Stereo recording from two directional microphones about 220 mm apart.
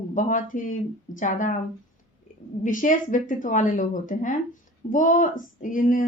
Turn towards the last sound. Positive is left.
turn(degrees=40)  # may be behind; listen again after turning